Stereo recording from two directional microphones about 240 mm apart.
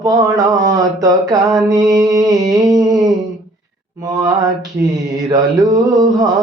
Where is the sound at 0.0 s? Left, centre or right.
Centre.